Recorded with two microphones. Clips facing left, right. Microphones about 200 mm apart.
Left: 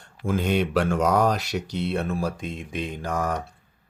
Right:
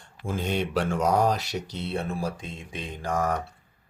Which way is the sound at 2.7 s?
55° left (ahead or behind).